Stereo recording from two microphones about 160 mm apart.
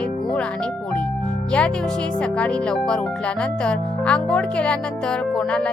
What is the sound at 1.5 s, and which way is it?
Speech, 5° left (ahead or behind).